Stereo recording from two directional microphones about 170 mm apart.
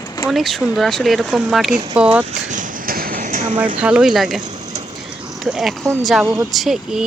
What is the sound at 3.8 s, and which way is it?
Speech, 5° right (ahead or behind).